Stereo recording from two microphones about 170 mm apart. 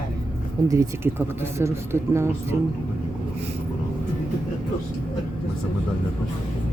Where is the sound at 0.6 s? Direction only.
20° right (ahead or behind).